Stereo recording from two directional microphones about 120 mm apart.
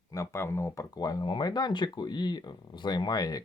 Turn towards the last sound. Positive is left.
turn(degrees=30)  # may be behind; listen again after turning